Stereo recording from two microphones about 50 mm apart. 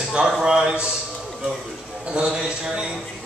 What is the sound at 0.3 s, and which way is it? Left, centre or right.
Speech, centre.